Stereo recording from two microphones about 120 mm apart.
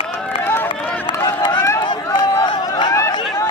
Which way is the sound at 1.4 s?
40° left (ahead or behind).